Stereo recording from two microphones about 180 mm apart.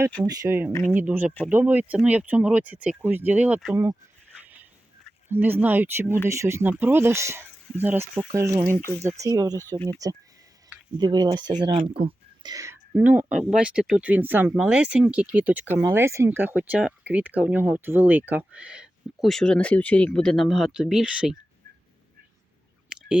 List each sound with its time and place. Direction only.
0.3 s speech: 15° right (ahead or behind)
0.7 s speech: 15° left (ahead or behind)
0.9 s speech: 10° right (ahead or behind)
5.3 s speech: 10° right (ahead or behind)
9.6 s speech: 10° left (ahead or behind)
11.0 s speech: 20° right (ahead or behind); by 21.3 s 5° right (ahead or behind)